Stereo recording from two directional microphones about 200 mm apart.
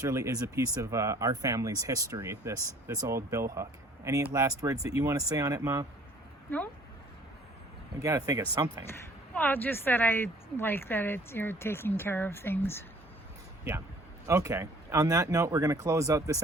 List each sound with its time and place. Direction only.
0.0 s speech: 15° right (ahead or behind)
7.9 s speech: 15° right (ahead or behind)
8.9 s speech: 10° left (ahead or behind)
14.3 s speech: 15° right (ahead or behind)